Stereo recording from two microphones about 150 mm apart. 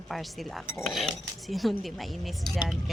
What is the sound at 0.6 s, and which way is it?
Speech, 15° left (ahead or behind).